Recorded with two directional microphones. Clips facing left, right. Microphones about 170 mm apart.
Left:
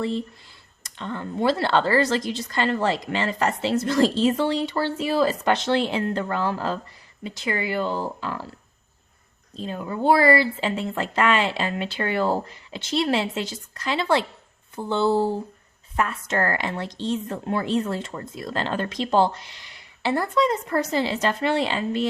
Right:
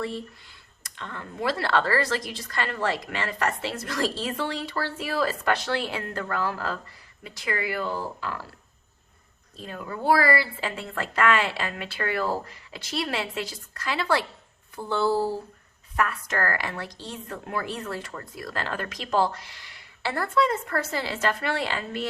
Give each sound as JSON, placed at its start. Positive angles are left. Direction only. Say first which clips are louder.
{"t": 0.8, "sound": "a woman's voice", "louder": "left 7 dB", "side_deg": 25}
{"t": 9.6, "sound": "a woman's voice", "louder": "left 6 dB", "side_deg": 25}